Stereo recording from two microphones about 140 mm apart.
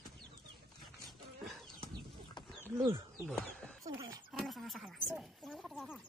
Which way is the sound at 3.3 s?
5° left (ahead or behind).